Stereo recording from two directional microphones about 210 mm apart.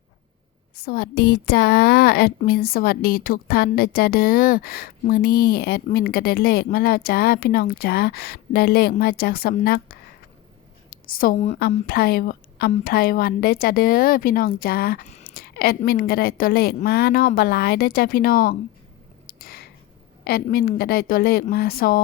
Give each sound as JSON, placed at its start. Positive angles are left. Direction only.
{"t": 0.8, "sound": "a woman's voice", "side_deg": 45}
{"t": 11.9, "sound": "speech", "side_deg": 45}
{"t": 19.3, "sound": "a sound", "side_deg": 45}
{"t": 20.2, "sound": "speech", "side_deg": 45}